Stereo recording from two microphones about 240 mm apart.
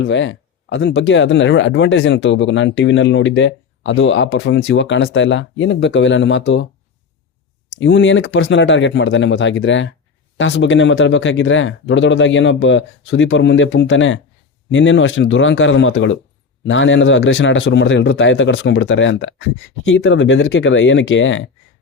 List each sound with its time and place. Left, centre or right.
0.0 s speech: left
7.8 s speech: left